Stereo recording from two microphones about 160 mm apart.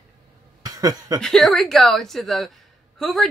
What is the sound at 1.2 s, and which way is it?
A woman's voice, centre (ahead or behind).